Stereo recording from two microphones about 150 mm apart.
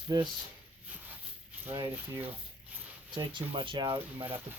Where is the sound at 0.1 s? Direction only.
25° right (ahead or behind).